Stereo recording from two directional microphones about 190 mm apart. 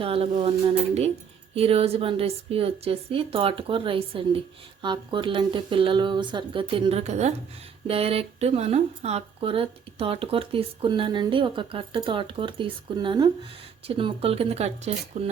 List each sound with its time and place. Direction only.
0.0 s a woman's voice: 30° right (ahead or behind)
1.5 s a woman's voice: 30° right (ahead or behind)